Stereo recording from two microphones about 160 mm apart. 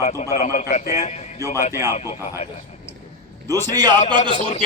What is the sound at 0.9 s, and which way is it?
Speech, 45° left (ahead or behind).